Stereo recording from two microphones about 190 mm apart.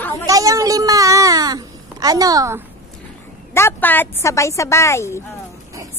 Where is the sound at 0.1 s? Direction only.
20° right (ahead or behind).